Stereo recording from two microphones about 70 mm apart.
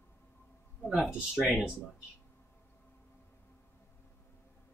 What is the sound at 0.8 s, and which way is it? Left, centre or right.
Speech, centre.